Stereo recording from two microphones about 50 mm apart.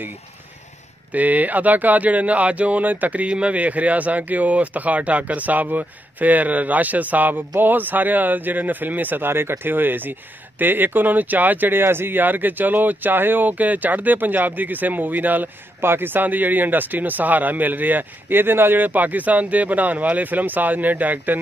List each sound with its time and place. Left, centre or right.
1.1 s speech: right
15.8 s speech: right
18.9 s speech: right